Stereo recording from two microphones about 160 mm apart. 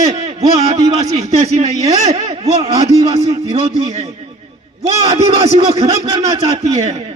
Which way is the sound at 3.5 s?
40° right (ahead or behind).